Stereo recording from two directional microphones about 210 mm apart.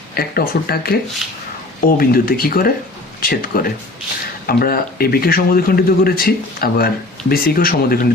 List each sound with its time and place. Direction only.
0.1 s speech: 45° left (ahead or behind)
1.2 s speech: centre (ahead or behind)
2.0 s speech: 45° left (ahead or behind)